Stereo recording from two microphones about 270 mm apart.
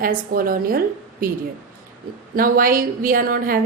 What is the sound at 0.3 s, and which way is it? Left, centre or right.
A woman's voice, right.